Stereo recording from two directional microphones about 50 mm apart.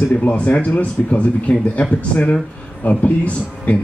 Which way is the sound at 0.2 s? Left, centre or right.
Left.